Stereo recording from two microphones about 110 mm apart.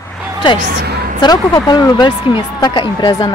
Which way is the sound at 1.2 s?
40° left (ahead or behind).